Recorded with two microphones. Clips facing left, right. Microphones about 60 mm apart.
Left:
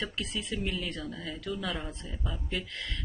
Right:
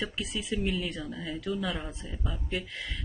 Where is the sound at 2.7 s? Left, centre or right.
Centre.